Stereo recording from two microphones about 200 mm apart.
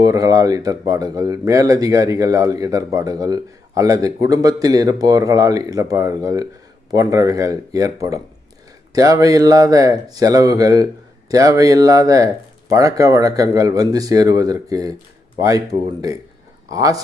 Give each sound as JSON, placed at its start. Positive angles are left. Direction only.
{"t": 0.0, "sound": "speech", "side_deg": -20}